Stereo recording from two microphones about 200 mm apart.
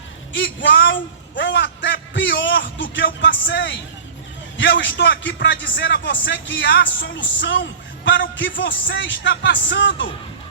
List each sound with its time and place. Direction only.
0.3 s a man's voice: 65° left (ahead or behind)